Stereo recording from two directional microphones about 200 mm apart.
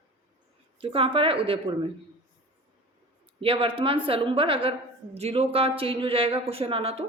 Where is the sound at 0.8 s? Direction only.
25° right (ahead or behind).